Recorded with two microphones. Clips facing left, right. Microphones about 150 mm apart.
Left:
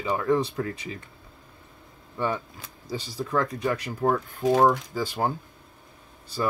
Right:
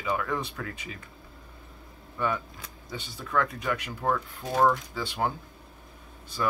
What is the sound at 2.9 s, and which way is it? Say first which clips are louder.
Speech: left 3 dB; 35° left (ahead or behind).